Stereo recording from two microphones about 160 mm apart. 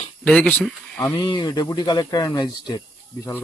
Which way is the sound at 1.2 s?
30° left (ahead or behind).